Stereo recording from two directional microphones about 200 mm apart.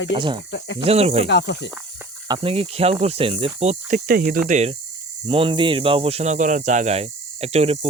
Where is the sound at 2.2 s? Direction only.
25° right (ahead or behind).